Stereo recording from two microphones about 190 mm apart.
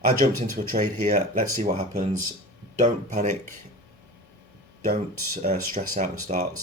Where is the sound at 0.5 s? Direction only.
45° right (ahead or behind).